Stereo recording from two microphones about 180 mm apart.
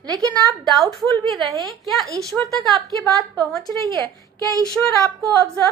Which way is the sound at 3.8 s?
25° right (ahead or behind).